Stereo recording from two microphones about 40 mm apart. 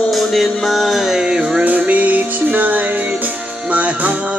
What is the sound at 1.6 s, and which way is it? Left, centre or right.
Music, right.